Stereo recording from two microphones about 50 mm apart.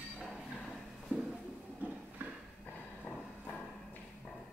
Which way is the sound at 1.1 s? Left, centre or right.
Right.